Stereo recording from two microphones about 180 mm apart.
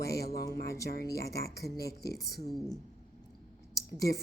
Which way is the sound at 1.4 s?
60° left (ahead or behind).